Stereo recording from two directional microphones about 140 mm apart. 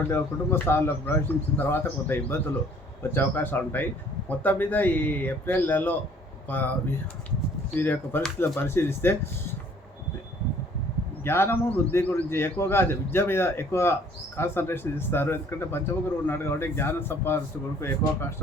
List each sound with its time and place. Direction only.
0.1 s a man's voice: 15° left (ahead or behind)
11.2 s a man's voice: 15° left (ahead or behind)